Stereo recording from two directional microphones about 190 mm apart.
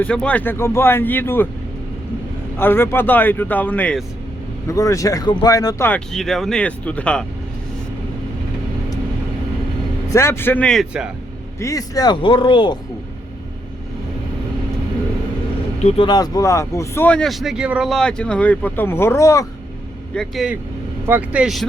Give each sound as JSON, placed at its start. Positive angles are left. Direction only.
{"t": 0.0, "sound": "speech", "side_deg": 5}
{"t": 2.6, "sound": "speech", "side_deg": 10}
{"t": 5.9, "sound": "speech", "side_deg": 0}
{"t": 10.1, "sound": "speech", "side_deg": 15}
{"t": 11.6, "sound": "speech", "side_deg": 20}
{"t": 15.8, "sound": "speech", "side_deg": 35}
{"t": 16.0, "sound": "speech", "side_deg": 20}
{"t": 20.1, "sound": "speech", "side_deg": 0}